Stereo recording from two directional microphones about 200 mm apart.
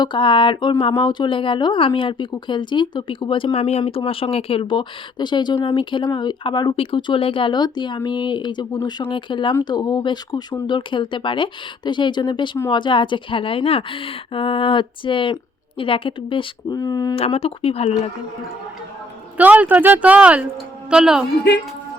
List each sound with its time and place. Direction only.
0.0 s speech: 25° left (ahead or behind)
17.2 s speech: 30° left (ahead or behind)
19.4 s a woman's voice: 10° right (ahead or behind)
21.5 s speech: 60° left (ahead or behind)